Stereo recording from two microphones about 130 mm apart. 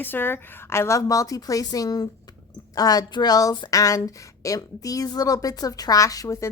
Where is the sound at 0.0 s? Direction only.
15° left (ahead or behind).